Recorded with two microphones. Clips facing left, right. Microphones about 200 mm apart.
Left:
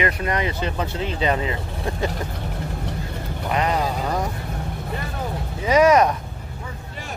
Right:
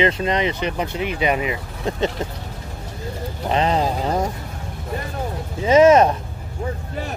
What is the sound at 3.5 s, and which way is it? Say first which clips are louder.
Speech: right 3 dB; 25° right (ahead or behind).